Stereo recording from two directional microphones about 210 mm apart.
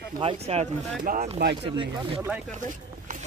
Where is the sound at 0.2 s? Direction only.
30° right (ahead or behind).